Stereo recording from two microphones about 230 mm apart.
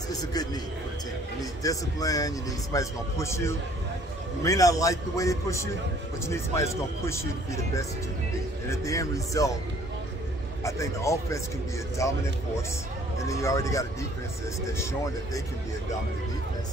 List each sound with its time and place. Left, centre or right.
0.1 s speech: centre
10.6 s speech: centre
13.2 s speech: centre